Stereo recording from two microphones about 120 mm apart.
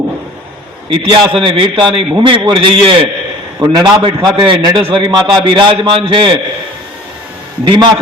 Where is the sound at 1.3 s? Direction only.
45° right (ahead or behind).